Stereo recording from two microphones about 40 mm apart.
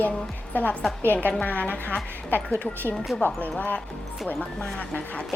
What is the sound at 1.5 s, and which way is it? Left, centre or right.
Speech, left.